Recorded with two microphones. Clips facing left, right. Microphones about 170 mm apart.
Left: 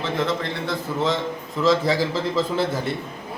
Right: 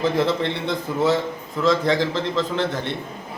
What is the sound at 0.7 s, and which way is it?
Speech, 10° right (ahead or behind).